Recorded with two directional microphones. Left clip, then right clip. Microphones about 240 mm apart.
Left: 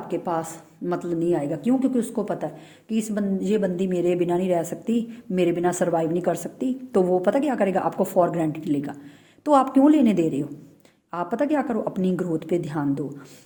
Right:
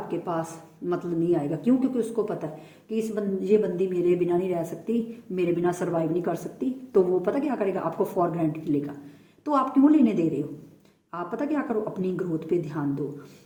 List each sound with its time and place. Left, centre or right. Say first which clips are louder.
0.1 s a woman's voice: left 4 dB; left